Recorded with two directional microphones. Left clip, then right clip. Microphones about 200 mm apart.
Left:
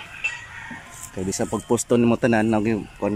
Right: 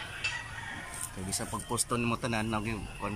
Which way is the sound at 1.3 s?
35° left (ahead or behind).